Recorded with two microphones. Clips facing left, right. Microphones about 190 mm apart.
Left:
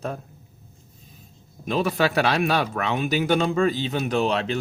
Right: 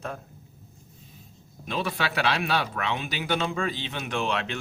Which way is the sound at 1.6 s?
45° left (ahead or behind).